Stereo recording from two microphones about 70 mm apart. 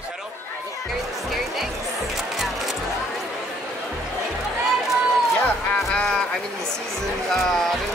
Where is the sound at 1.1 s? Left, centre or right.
Centre.